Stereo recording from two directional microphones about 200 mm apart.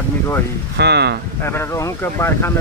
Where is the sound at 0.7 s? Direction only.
55° right (ahead or behind).